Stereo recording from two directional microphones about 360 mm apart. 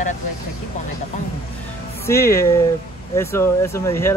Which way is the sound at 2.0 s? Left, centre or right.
Centre.